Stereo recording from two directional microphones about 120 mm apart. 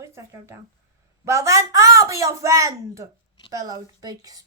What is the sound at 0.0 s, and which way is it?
A woman's voice, 25° right (ahead or behind).